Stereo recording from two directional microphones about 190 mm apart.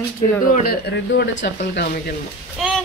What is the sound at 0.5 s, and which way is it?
Speech, 55° left (ahead or behind).